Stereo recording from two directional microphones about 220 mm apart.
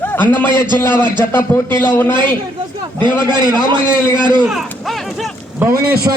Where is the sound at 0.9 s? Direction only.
20° right (ahead or behind).